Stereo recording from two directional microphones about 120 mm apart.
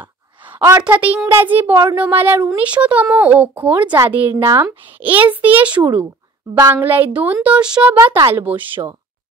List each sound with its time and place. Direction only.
0.0 s a sound: 15° right (ahead or behind)
0.8 s a woman's voice: 10° right (ahead or behind)
7.9 s a woman's voice: 20° right (ahead or behind)